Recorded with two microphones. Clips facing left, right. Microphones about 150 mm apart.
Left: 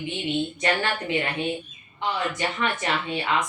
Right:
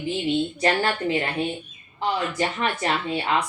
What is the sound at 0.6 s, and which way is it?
Speech, 35° right (ahead or behind).